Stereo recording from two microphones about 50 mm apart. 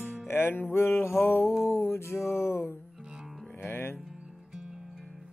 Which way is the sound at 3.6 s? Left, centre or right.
Left.